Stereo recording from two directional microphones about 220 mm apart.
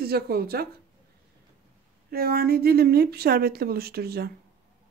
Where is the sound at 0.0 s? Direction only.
45° right (ahead or behind).